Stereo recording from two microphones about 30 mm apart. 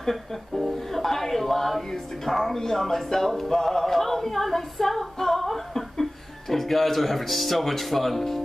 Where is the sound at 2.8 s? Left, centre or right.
Centre.